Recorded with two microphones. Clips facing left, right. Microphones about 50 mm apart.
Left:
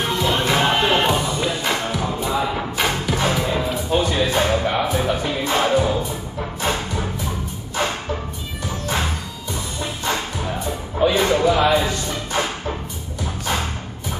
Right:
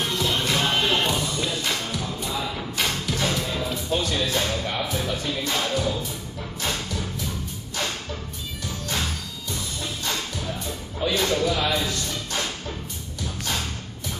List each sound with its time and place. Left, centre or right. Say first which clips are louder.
0.0 s music: left 5 dB; centre
7.7 s a sound: left 7 dB; left
8.6 s music: left 6 dB; left
13.2 s dog: left 5 dB; left